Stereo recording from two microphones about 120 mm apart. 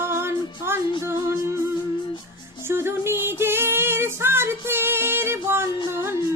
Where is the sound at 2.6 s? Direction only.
20° right (ahead or behind).